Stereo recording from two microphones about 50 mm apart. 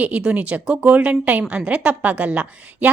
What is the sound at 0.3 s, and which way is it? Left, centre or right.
A woman's voice, right.